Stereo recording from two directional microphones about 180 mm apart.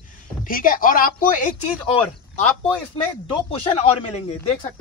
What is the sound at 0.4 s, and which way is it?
Speech, 50° left (ahead or behind).